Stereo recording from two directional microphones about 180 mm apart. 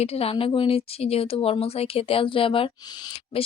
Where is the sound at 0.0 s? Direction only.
35° left (ahead or behind).